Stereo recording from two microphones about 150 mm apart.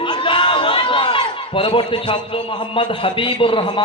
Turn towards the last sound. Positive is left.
turn(degrees=35)  # may be behind; listen again after turning